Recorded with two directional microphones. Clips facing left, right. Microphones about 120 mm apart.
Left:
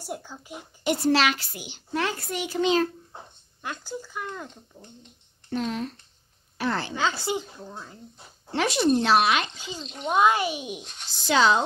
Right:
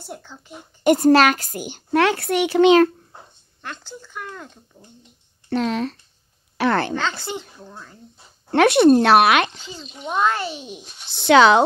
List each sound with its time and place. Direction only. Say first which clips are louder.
0.0 s speech: left 1 dB; 10° left (ahead or behind)
0.8 s a woman's voice: right 8 dB; 50° right (ahead or behind)
2.0 s a child's voice: right 10 dB; 70° right (ahead or behind)
3.6 s speech: left 2 dB; 10° left (ahead or behind)
5.5 s speech: right 7 dB; 90° right
6.6 s speech: right 8 dB; 65° right (ahead or behind)
7.2 s speech: left 2 dB; 10° left (ahead or behind)
8.5 s speech: right 10 dB; 65° right (ahead or behind)
9.6 s speech: left 1 dB; 15° left (ahead or behind)
9.8 s speech: left 1 dB; 5° right (ahead or behind)
10.1 s speech: even; 10° left (ahead or behind)
10.8 s speech: left 1 dB; 5° right (ahead or behind)
11.1 s a child's voice: right 8 dB; 65° right (ahead or behind)